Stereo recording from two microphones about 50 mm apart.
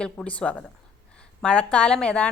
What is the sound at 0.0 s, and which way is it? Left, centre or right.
A woman's voice, left.